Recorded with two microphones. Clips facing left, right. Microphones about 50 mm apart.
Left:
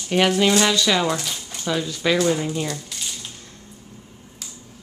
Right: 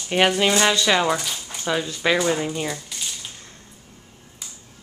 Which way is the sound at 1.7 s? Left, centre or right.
Centre.